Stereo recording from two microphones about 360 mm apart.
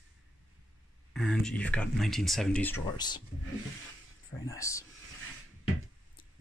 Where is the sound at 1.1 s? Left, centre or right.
Centre.